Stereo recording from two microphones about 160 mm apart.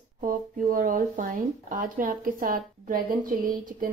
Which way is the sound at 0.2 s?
60° right (ahead or behind).